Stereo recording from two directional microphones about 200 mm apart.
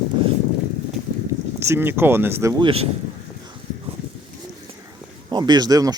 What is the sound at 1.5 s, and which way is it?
Speech, 15° right (ahead or behind).